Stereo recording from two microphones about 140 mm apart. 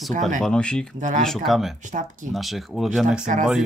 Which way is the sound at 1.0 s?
65° right (ahead or behind).